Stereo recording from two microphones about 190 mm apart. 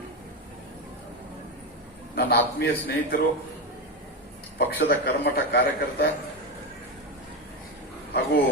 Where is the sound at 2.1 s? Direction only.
55° left (ahead or behind).